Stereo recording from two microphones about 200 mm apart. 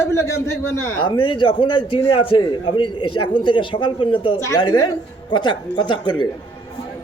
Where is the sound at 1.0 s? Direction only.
25° left (ahead or behind).